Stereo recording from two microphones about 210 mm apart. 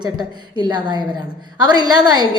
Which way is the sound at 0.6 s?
20° right (ahead or behind).